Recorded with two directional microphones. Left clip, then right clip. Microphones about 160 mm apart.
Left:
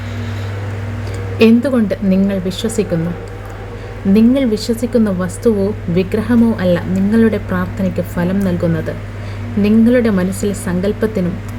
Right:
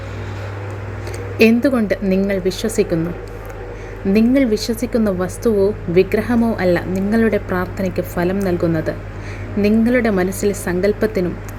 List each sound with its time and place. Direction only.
1.4 s a woman's voice: 40° right (ahead or behind)
4.1 s a woman's voice: 40° right (ahead or behind)